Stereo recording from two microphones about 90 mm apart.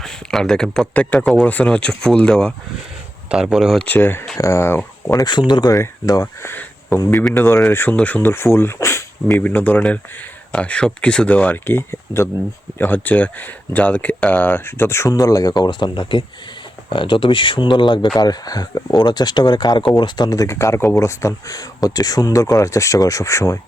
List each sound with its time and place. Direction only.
0.0 s speech: 5° left (ahead or behind)
3.2 s speech: 5° right (ahead or behind)
3.8 s speech: 20° left (ahead or behind)
5.1 s speech: 50° left (ahead or behind)
5.8 s speech: 40° left (ahead or behind)
6.4 s a sound: 25° left (ahead or behind)
7.3 s speech: 25° left (ahead or behind)
9.4 s speech: 20° left (ahead or behind)
12.8 s speech: 20° left (ahead or behind); by 18.1 s 60° left (ahead or behind)
18.2 s speech: 45° left (ahead or behind)
20.5 s speech: 30° left (ahead or behind)